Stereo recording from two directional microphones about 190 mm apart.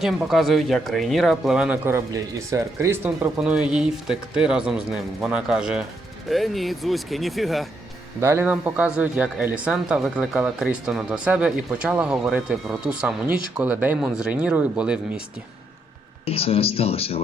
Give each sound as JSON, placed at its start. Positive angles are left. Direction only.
{"t": 0.0, "sound": "speech", "side_deg": 0}
{"t": 8.2, "sound": "a man's voice", "side_deg": -10}
{"t": 16.2, "sound": "speech", "side_deg": 30}